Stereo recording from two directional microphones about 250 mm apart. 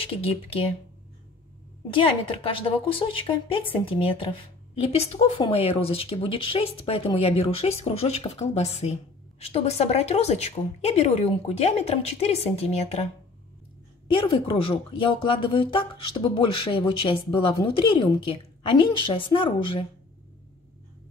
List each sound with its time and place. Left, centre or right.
0.0 s a woman's voice: left
1.9 s a woman's voice: centre